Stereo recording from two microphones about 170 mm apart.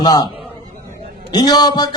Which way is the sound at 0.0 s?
25° left (ahead or behind).